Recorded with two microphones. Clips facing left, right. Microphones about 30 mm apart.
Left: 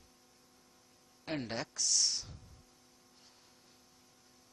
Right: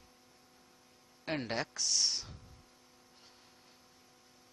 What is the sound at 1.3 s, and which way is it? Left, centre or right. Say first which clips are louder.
Speech: right 2 dB; centre.